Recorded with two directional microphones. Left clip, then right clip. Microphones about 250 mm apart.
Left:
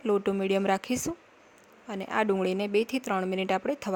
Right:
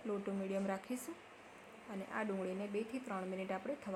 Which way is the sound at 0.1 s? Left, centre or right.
Left.